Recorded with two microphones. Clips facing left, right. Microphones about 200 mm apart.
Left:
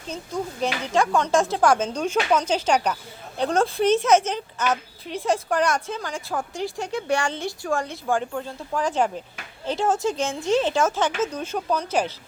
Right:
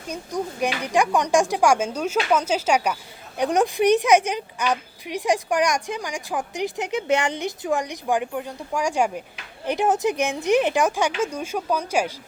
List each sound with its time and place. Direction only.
0.1 s speech: 15° right (ahead or behind)